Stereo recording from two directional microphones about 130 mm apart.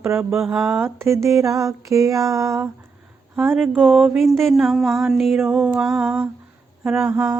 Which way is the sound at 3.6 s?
5° left (ahead or behind).